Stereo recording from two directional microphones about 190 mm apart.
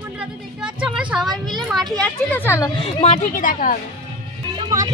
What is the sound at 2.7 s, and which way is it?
Speech, 30° left (ahead or behind).